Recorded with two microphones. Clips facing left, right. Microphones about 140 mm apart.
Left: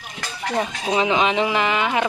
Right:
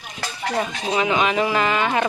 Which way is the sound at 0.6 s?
20° left (ahead or behind).